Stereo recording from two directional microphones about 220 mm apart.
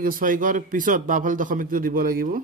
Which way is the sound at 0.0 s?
40° right (ahead or behind).